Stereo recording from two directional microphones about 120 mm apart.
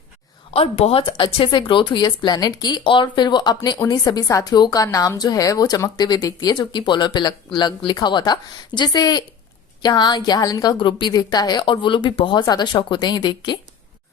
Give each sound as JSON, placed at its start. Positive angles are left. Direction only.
{"t": 0.5, "sound": "a woman's voice", "side_deg": 55}